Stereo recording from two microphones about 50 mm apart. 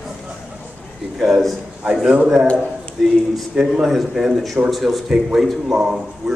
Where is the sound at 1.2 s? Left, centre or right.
Centre.